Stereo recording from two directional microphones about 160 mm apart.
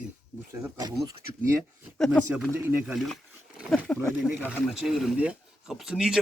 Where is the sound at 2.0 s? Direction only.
5° left (ahead or behind).